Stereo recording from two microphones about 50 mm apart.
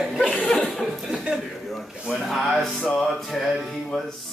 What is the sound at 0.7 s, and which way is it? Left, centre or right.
Chuckle, centre.